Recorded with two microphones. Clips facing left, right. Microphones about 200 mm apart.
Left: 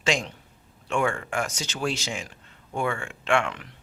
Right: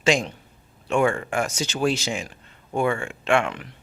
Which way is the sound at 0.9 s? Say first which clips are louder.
Right 5 dB; 20° right (ahead or behind).